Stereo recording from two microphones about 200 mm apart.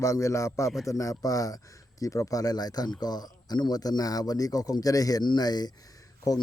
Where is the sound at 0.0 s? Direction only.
15° left (ahead or behind).